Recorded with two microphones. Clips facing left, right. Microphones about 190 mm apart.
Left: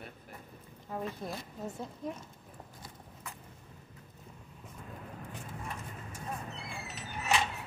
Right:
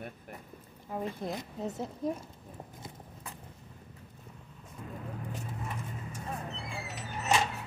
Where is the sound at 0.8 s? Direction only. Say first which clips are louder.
Right 2 dB; 5° right (ahead or behind).